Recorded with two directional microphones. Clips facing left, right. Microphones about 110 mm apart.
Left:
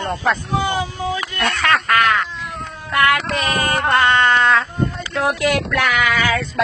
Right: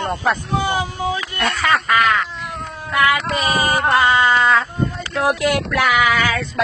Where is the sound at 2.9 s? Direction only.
Centre (ahead or behind).